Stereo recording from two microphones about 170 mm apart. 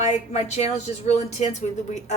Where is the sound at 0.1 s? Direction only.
40° left (ahead or behind).